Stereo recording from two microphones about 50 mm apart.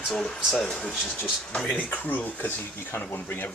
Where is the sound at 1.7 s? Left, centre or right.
Left.